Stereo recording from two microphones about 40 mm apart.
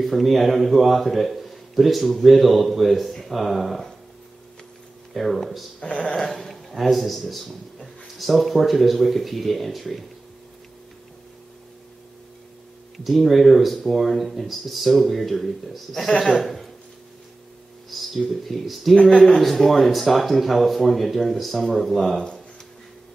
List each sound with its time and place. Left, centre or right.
0.0 s a man's voice: centre
5.1 s a man's voice: centre
5.8 s speech: left
6.1 s a man's voice: centre
12.9 s a man's voice: centre
17.8 s a sound: centre
18.3 s a man's voice: centre